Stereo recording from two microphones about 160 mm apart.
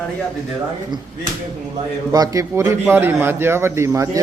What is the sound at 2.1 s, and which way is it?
A man's voice, 20° right (ahead or behind).